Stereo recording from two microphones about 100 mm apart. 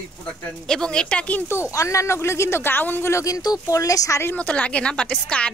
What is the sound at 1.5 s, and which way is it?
Speech, 30° left (ahead or behind).